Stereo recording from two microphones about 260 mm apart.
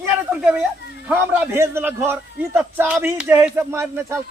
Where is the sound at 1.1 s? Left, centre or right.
Centre.